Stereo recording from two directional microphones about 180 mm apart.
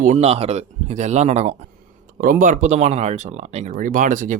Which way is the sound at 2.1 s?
50° right (ahead or behind).